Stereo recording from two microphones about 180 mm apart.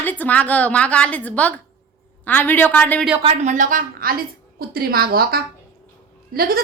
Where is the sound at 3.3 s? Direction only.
40° right (ahead or behind).